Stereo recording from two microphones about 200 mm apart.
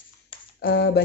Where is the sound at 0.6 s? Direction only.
55° left (ahead or behind).